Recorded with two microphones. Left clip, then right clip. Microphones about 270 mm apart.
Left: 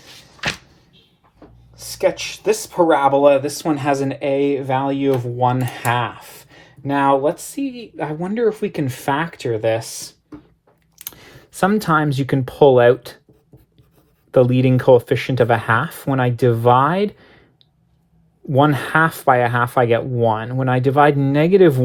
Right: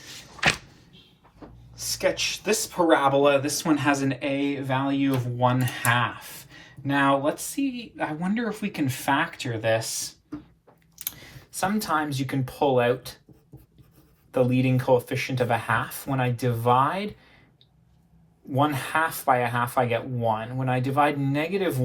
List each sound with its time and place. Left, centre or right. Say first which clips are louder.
1.7 s speech: left 6 dB; left
14.3 s speech: left 9 dB; left
18.7 s speech: left 8 dB; left